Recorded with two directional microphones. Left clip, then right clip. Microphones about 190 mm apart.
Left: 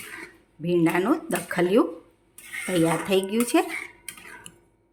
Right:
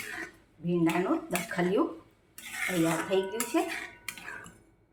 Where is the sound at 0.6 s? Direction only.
55° left (ahead or behind).